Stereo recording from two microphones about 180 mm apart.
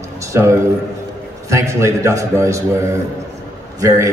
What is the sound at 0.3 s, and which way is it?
A man's voice, 15° right (ahead or behind).